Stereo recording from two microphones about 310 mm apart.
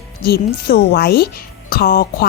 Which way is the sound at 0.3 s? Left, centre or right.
Left.